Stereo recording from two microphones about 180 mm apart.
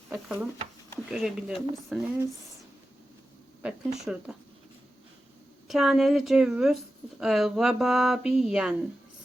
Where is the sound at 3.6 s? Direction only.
5° right (ahead or behind).